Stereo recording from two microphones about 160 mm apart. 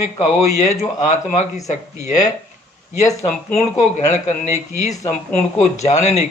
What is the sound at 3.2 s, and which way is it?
Speech, 45° left (ahead or behind).